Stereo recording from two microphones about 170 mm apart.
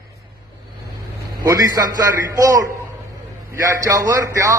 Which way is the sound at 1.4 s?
20° right (ahead or behind).